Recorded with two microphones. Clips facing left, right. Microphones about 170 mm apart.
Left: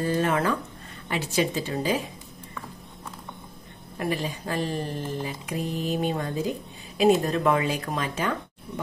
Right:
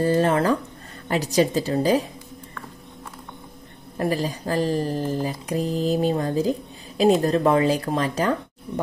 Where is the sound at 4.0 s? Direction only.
40° right (ahead or behind).